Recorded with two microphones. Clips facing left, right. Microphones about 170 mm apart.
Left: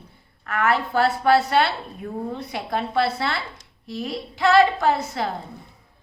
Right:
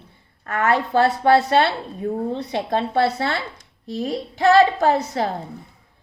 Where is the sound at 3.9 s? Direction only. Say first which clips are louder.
Right 4 dB; 40° right (ahead or behind).